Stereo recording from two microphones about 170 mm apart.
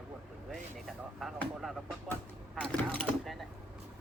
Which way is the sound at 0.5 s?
Centre (ahead or behind).